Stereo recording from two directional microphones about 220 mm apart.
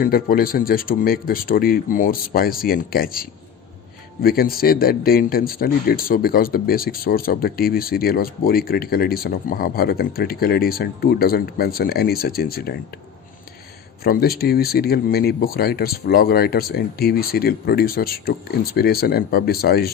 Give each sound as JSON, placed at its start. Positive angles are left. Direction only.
{"t": 0.0, "sound": "speech", "side_deg": 40}
{"t": 14.0, "sound": "speech", "side_deg": 45}